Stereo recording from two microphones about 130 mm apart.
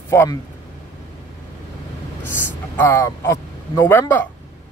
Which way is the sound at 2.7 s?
20° left (ahead or behind).